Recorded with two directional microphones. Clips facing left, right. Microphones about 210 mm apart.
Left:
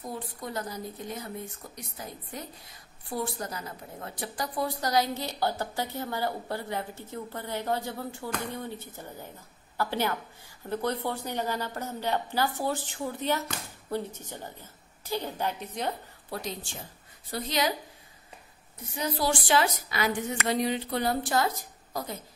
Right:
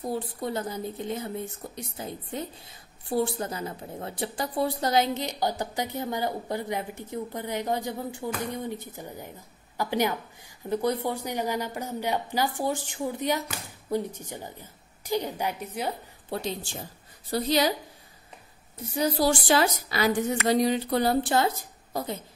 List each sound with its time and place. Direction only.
0.0 s speech: 30° right (ahead or behind); by 15.9 s 10° right (ahead or behind)
16.3 s a woman's voice: 30° right (ahead or behind)
18.9 s a woman's voice: 40° right (ahead or behind)